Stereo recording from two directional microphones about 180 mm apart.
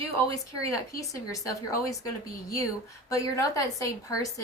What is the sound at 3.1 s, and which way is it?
Speech, 20° left (ahead or behind).